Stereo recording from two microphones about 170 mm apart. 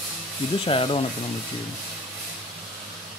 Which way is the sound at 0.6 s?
30° left (ahead or behind).